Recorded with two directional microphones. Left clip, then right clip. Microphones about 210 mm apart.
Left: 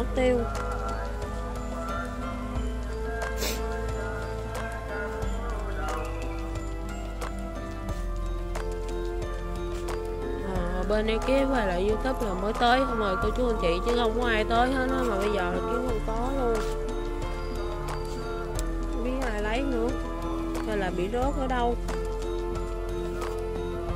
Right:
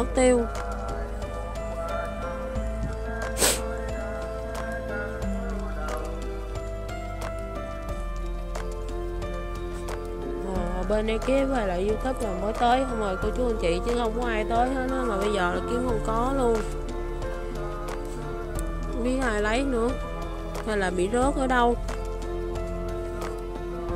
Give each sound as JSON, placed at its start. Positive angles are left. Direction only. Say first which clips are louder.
{"t": 0.1, "sound": "speech", "louder": "right 4 dB", "side_deg": -25}
{"t": 10.9, "sound": "speech", "louder": "right 1 dB", "side_deg": -10}
{"t": 19.3, "sound": "music", "louder": "right 3 dB", "side_deg": -30}
{"t": 20.6, "sound": "speech", "louder": "right 6 dB", "side_deg": -25}